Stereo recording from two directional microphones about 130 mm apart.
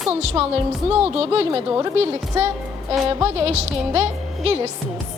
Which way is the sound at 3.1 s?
45° right (ahead or behind).